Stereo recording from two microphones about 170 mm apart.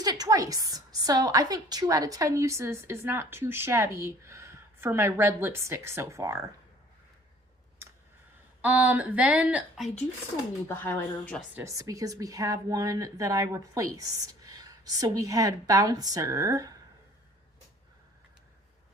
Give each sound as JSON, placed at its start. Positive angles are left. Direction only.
{"t": 0.0, "sound": "a woman's voice", "side_deg": -20}
{"t": 8.6, "sound": "a woman's voice", "side_deg": -10}
{"t": 10.7, "sound": "speech", "side_deg": 15}
{"t": 11.5, "sound": "a woman's voice", "side_deg": -20}